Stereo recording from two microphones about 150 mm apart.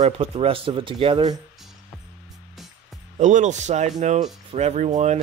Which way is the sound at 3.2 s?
55° right (ahead or behind).